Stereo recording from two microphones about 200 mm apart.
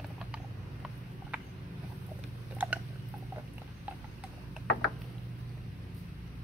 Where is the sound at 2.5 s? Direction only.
10° right (ahead or behind).